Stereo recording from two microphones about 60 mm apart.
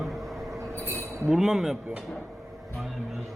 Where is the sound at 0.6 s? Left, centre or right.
Right.